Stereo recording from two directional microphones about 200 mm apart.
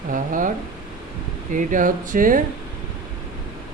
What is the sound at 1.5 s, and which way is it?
Speech, 40° right (ahead or behind).